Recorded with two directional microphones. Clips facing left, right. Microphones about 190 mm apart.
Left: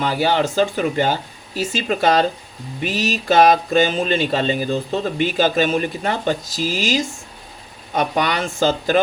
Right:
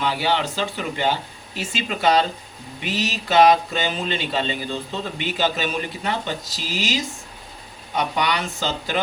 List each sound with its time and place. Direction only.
0.0 s speech: 45° left (ahead or behind)